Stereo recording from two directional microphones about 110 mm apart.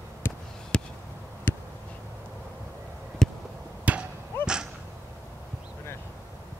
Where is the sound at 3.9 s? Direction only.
15° right (ahead or behind).